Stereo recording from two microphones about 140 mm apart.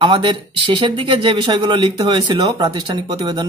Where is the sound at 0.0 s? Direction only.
35° right (ahead or behind).